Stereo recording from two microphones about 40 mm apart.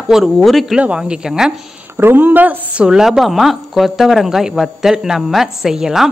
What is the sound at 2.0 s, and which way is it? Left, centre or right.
Speech, right.